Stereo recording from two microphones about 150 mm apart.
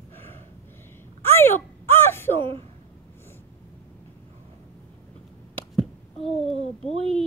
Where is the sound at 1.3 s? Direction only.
15° left (ahead or behind).